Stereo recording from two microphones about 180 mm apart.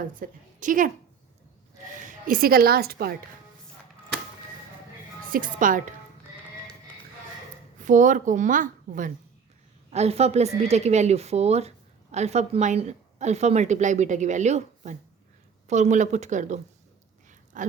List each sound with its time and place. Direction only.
0.2 s a woman's voice: 45° right (ahead or behind)
2.0 s speech: 45° right (ahead or behind)
5.2 s a woman's voice: 50° right (ahead or behind)
7.8 s a woman's voice: 45° right (ahead or behind)
9.9 s a woman's voice: 35° right (ahead or behind)